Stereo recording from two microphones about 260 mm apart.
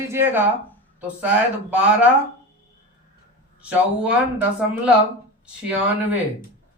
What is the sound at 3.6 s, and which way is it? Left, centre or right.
Speech, centre.